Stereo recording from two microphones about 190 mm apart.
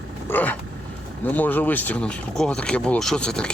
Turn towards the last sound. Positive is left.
turn(degrees=5)  # may be behind; listen again after turning